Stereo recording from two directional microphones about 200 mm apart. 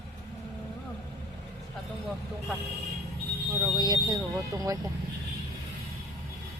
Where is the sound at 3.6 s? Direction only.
20° right (ahead or behind).